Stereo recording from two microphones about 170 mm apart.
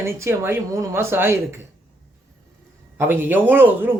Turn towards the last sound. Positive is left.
turn(degrees=-10)  # may be behind; listen again after turning